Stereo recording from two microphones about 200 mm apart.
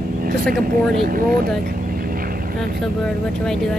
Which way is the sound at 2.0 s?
45° right (ahead or behind).